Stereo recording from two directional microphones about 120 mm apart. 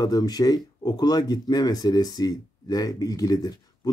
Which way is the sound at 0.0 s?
30° left (ahead or behind).